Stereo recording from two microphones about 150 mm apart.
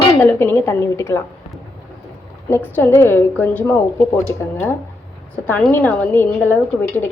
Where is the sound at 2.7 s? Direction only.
15° left (ahead or behind).